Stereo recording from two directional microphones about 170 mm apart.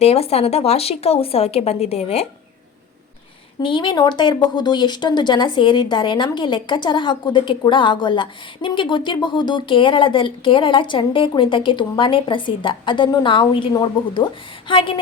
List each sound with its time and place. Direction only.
0.0 s speech: 35° left (ahead or behind)
3.6 s speech: 30° left (ahead or behind)